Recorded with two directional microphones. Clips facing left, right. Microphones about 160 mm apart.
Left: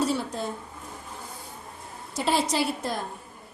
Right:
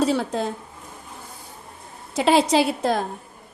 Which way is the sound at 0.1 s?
90° right.